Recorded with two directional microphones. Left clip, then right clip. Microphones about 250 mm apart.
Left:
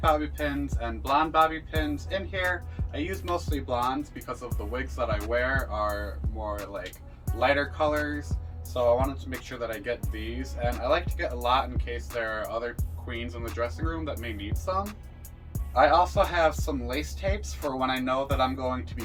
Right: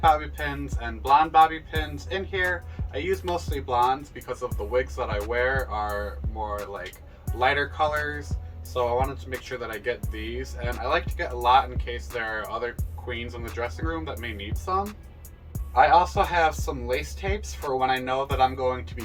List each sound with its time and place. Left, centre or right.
0.0 s speech: centre
7.3 s speech: centre